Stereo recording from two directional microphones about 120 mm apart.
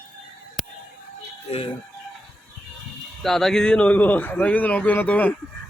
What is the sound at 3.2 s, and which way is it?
Speech, 5° left (ahead or behind).